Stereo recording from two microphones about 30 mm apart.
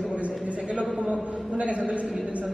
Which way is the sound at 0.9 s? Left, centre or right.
Right.